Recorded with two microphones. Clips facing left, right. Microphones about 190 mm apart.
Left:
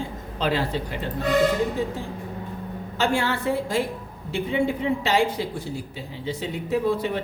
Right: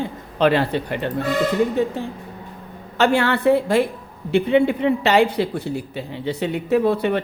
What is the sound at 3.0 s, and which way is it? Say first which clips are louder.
Speech: right 6 dB; 65° right (ahead or behind).